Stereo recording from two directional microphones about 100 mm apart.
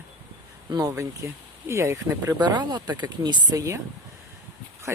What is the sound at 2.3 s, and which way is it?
Speech, 45° right (ahead or behind).